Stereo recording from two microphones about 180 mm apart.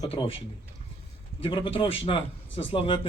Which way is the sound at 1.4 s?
30° left (ahead or behind).